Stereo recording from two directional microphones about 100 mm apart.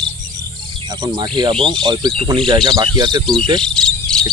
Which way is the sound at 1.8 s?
45° right (ahead or behind).